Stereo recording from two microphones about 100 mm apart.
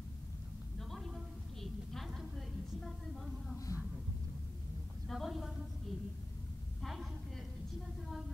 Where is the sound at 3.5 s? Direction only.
35° left (ahead or behind).